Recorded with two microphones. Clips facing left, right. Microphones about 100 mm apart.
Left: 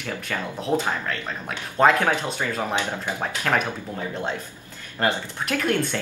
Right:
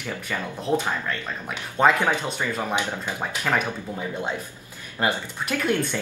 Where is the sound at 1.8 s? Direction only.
15° right (ahead or behind).